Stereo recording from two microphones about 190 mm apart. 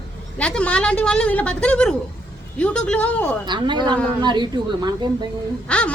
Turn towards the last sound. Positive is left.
turn(degrees=5)  # may be behind; listen again after turning